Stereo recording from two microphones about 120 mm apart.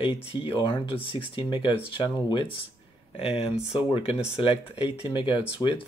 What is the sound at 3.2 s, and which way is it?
Speech, 55° left (ahead or behind).